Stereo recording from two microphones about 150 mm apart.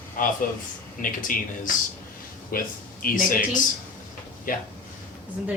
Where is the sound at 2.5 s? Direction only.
70° left (ahead or behind).